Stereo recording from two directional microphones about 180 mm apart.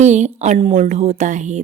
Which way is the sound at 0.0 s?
40° right (ahead or behind).